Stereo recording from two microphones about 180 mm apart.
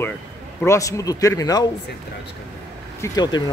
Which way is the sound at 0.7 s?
15° left (ahead or behind).